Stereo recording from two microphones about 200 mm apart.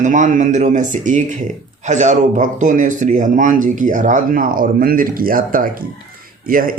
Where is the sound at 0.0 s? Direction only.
40° right (ahead or behind).